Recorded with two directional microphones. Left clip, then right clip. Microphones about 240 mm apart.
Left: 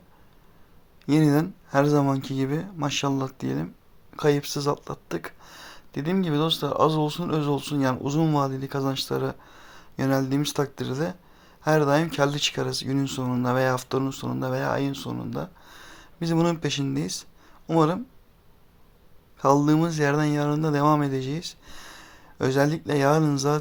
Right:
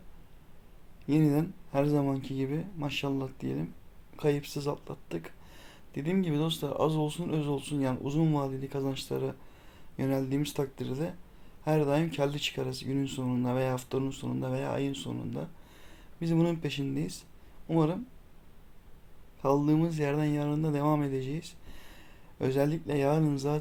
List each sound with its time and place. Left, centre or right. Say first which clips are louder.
1.0 s speech: left 6 dB; centre
19.4 s speech: left 7 dB; centre